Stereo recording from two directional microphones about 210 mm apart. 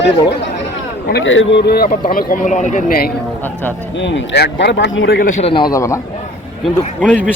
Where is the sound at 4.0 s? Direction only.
60° left (ahead or behind).